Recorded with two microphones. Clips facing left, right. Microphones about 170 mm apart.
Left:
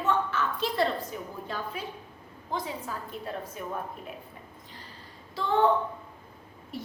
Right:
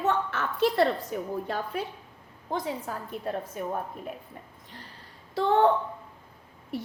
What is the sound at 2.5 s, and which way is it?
A woman's voice, 50° right (ahead or behind).